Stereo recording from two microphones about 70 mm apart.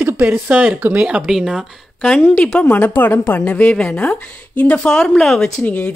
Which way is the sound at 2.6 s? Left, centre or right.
Left.